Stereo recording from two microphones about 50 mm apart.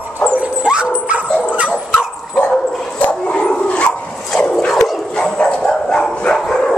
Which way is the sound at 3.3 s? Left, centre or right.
Left.